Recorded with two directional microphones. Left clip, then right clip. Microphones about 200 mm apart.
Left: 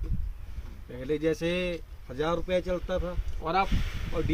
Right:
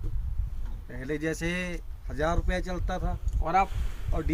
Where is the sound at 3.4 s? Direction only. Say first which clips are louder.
Right 2 dB; 20° right (ahead or behind).